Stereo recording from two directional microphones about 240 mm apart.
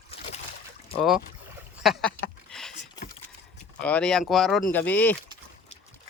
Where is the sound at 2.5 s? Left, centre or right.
Centre.